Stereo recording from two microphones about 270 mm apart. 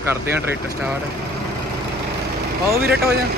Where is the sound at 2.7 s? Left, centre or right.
Right.